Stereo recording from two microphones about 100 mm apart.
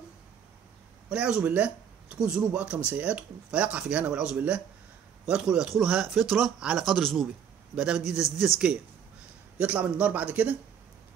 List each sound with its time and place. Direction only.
1.0 s speech: 10° right (ahead or behind)
7.7 s speech: 10° right (ahead or behind)
9.6 s speech: 15° right (ahead or behind)